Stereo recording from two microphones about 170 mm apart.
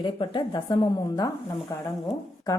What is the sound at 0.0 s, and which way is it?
A woman's voice, 30° left (ahead or behind).